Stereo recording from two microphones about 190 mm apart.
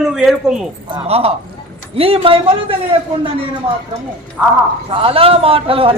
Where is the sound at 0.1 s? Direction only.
5° right (ahead or behind).